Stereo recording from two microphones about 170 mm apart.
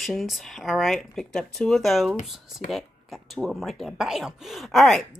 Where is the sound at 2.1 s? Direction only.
45° left (ahead or behind).